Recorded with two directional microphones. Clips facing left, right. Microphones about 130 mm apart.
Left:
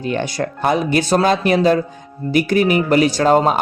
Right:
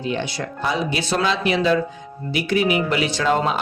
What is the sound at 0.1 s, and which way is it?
Speech, 50° left (ahead or behind).